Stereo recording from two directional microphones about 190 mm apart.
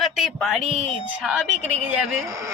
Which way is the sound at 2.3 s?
15° right (ahead or behind).